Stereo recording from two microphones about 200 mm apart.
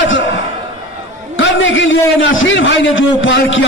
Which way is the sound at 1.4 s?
70° left (ahead or behind).